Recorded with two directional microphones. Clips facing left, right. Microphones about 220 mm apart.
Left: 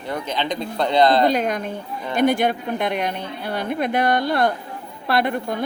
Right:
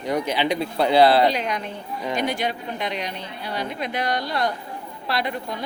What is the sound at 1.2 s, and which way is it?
Speech, 50° left (ahead or behind).